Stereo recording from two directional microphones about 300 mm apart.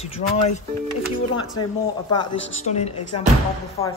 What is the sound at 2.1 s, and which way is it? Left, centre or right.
Speech, centre.